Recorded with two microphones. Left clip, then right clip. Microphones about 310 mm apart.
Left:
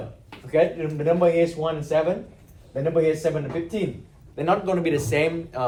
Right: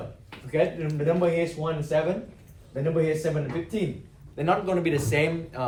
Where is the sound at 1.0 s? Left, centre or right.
Centre.